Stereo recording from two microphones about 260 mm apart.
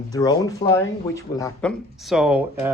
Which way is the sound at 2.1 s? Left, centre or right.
Centre.